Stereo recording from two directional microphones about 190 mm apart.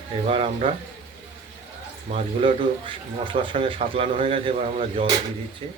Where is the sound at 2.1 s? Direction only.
25° right (ahead or behind).